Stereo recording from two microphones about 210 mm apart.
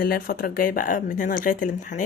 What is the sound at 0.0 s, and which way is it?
Speech, 45° left (ahead or behind).